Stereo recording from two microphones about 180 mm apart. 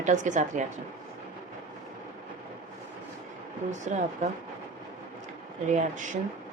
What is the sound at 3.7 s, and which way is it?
Speech, 40° right (ahead or behind).